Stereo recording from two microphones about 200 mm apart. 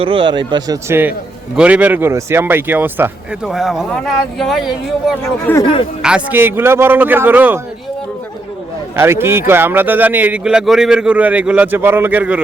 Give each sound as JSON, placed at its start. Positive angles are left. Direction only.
{"t": 0.0, "sound": "a man's voice", "side_deg": -25}
{"t": 5.2, "sound": "speech", "side_deg": 10}
{"t": 6.0, "sound": "a man's voice", "side_deg": -5}
{"t": 9.0, "sound": "a man's voice", "side_deg": -10}